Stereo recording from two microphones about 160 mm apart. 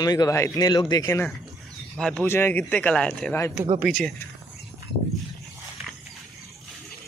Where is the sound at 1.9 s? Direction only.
5° left (ahead or behind).